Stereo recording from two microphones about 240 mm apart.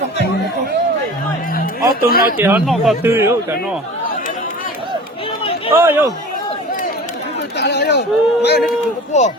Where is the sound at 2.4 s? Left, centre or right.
Centre.